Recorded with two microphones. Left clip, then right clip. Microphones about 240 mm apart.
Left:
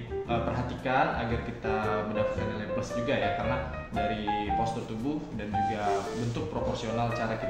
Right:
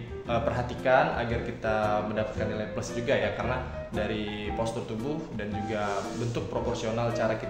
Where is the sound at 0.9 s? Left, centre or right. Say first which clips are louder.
Right 5 dB; right.